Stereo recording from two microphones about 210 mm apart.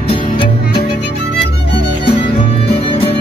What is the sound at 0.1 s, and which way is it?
Music, 25° left (ahead or behind).